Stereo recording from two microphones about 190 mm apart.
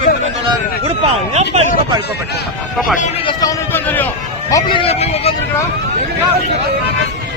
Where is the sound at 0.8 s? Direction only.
35° right (ahead or behind).